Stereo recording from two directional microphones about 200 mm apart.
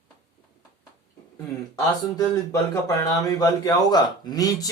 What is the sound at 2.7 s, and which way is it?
A man's voice, 15° left (ahead or behind).